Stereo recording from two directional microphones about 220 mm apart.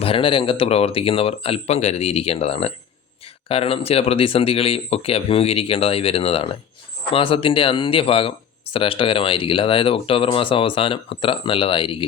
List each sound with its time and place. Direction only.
0.0 s speech: 25° left (ahead or behind)